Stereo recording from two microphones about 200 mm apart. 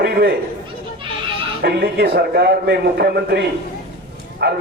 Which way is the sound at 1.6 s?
50° right (ahead or behind).